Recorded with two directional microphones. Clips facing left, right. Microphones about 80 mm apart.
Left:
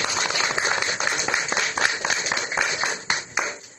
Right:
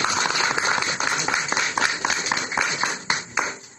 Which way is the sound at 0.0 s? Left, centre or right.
Right.